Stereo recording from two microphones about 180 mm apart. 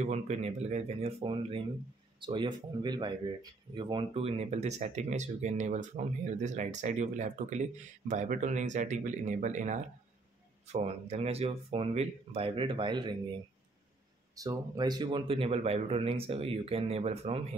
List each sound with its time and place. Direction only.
0.0 s speech: 40° right (ahead or behind)